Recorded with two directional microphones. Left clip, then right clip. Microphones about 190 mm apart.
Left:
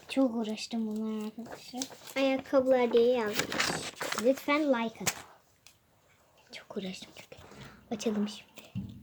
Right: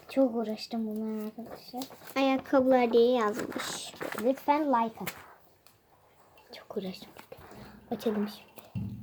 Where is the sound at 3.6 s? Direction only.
35° left (ahead or behind).